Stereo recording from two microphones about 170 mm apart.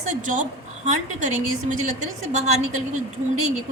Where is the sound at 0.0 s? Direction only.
45° right (ahead or behind).